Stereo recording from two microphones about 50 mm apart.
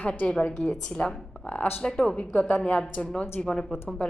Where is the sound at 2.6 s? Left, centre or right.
Left.